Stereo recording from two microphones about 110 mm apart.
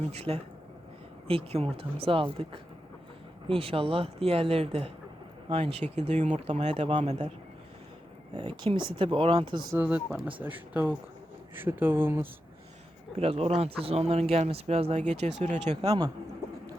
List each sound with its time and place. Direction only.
0.1 s speech: 70° right (ahead or behind); by 7.3 s 90° right
8.4 s speech: 50° right (ahead or behind)
9.7 s speech: 10° right (ahead or behind)
13.1 s speech: 65° right (ahead or behind); by 15.8 s 90° right